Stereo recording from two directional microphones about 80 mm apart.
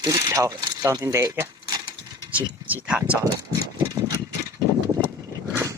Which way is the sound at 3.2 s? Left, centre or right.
Right.